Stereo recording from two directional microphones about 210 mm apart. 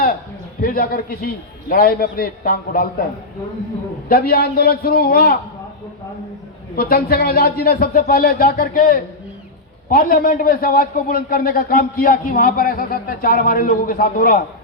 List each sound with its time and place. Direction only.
0.6 s a man's voice: 45° left (ahead or behind)
4.1 s a man's voice: 45° left (ahead or behind)
6.7 s a man's voice: 45° left (ahead or behind)